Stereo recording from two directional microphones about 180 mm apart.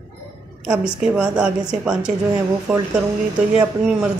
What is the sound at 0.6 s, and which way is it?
A woman's voice, 5° right (ahead or behind).